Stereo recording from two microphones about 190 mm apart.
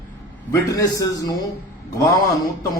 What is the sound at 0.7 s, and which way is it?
Speech, 20° left (ahead or behind).